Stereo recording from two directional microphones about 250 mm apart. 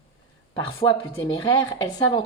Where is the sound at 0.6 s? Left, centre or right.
Centre.